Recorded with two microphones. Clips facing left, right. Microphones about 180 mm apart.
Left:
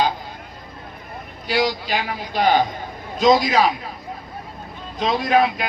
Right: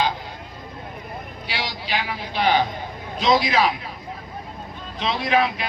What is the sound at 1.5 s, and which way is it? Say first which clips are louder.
A man's voice: left 9 dB; 45° left (ahead or behind).